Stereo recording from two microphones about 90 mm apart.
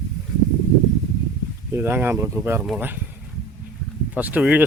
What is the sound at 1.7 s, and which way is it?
Speech, 25° right (ahead or behind).